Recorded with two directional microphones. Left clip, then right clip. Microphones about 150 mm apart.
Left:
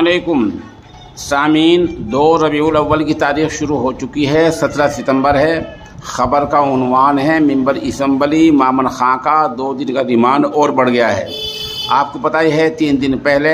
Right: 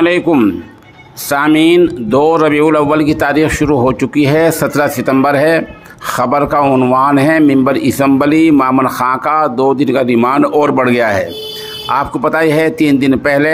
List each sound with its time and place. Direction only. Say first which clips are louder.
0.3 s a man's voice: right 5 dB; 35° right (ahead or behind)
6.6 s speech: right 3 dB; 20° right (ahead or behind)
7.0 s a man's voice: left 1 dB; 30° right (ahead or behind)